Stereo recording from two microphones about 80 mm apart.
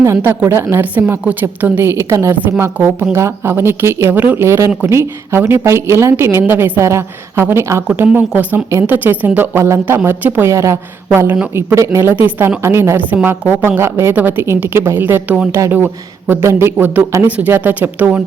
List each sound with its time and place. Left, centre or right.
0.0 s speech: right
0.9 s a woman's voice: right
4.1 s a woman's voice: right
4.4 s speech: right
8.3 s a woman's voice: centre